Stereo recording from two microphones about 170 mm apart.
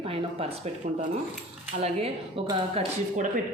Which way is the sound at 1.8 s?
35° right (ahead or behind).